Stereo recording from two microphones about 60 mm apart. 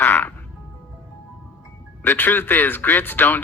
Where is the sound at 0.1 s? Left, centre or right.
Left.